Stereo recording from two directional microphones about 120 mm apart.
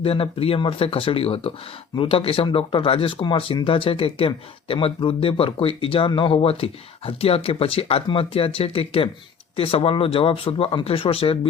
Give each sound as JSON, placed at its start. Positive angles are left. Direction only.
{"t": 0.0, "sound": "speech", "side_deg": 50}